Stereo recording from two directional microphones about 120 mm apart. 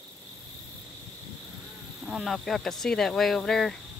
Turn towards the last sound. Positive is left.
turn(degrees=5)  # may be behind; listen again after turning